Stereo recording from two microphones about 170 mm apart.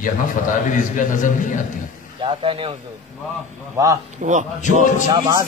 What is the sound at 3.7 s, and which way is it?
Speech, 20° right (ahead or behind).